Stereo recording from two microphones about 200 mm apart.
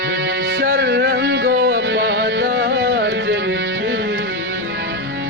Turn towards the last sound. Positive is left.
turn(degrees=-60)  # may be behind; listen again after turning